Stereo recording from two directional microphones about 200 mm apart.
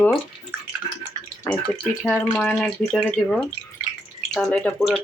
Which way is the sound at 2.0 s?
5° left (ahead or behind).